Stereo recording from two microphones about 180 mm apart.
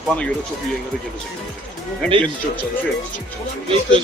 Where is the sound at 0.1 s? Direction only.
10° left (ahead or behind).